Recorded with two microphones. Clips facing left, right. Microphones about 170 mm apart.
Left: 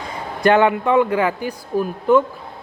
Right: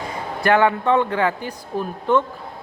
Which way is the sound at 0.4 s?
20° left (ahead or behind).